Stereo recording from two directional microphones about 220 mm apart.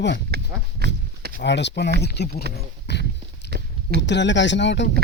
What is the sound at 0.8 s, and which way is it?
Speech, 45° right (ahead or behind).